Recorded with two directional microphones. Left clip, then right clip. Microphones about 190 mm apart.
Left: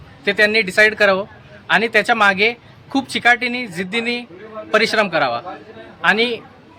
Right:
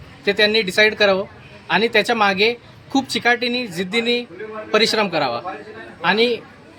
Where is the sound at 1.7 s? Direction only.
20° left (ahead or behind).